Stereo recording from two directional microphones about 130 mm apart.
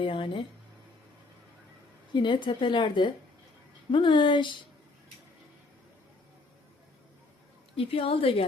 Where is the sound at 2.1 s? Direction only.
35° left (ahead or behind).